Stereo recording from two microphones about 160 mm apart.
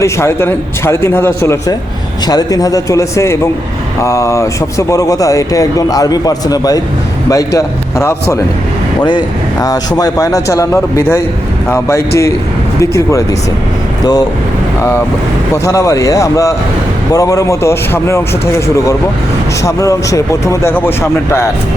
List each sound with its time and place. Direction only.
0.0 s a man's voice: 15° left (ahead or behind)
15.6 s speech: 20° left (ahead or behind)
19.6 s speech: 20° left (ahead or behind)